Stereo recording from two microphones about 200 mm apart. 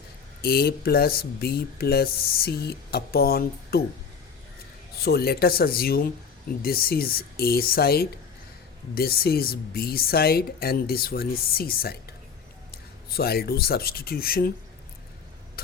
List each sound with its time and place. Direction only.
0.4 s speech: 50° left (ahead or behind)
5.0 s speech: 50° left (ahead or behind)
15.6 s a sound: 50° left (ahead or behind)